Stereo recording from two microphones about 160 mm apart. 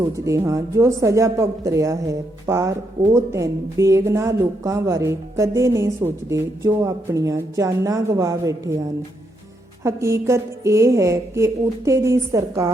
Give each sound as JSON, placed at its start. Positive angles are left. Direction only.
{"t": 0.0, "sound": "a woman's voice", "side_deg": -20}
{"t": 9.8, "sound": "a woman's voice", "side_deg": -20}